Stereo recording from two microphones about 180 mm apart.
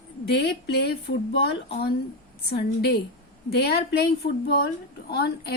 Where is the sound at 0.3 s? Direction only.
65° left (ahead or behind).